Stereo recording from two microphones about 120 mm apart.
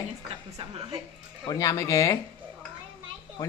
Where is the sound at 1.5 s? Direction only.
30° left (ahead or behind).